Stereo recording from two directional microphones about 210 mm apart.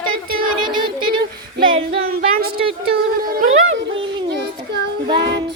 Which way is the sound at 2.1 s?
45° right (ahead or behind).